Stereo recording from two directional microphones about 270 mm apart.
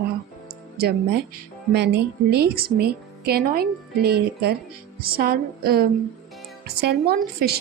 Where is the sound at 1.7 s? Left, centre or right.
Right.